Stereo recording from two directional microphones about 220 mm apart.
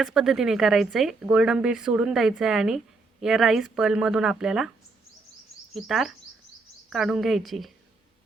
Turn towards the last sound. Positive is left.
turn(degrees=0)  # may be behind; listen again after turning